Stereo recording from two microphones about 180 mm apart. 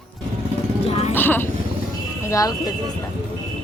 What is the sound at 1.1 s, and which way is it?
Speech, 10° left (ahead or behind).